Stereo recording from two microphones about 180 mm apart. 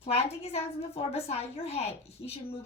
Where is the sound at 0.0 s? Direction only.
35° left (ahead or behind).